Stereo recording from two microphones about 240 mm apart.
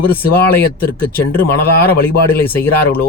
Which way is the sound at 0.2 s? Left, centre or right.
Centre.